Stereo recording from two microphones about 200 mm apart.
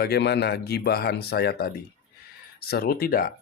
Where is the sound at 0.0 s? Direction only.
55° left (ahead or behind).